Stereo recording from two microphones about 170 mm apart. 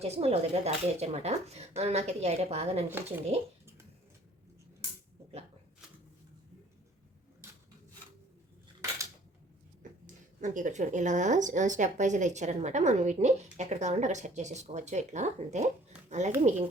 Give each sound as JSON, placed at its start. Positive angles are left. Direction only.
{"t": 0.0, "sound": "speech", "side_deg": -40}
{"t": 9.8, "sound": "a sound", "side_deg": -50}
{"t": 10.4, "sound": "a woman's voice", "side_deg": -50}